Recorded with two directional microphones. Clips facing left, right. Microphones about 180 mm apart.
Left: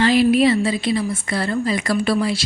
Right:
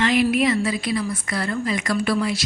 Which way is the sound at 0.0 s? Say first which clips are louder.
Left 4 dB; 30° left (ahead or behind).